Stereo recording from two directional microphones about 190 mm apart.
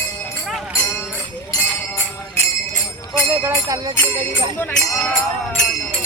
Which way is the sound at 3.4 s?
15° right (ahead or behind).